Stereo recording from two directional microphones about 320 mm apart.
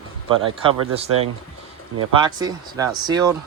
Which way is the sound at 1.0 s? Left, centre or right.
Right.